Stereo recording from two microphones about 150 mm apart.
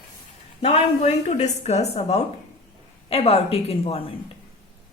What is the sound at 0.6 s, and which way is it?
Speech, 40° left (ahead or behind).